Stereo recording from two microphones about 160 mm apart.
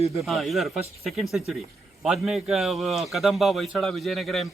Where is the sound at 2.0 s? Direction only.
Centre (ahead or behind).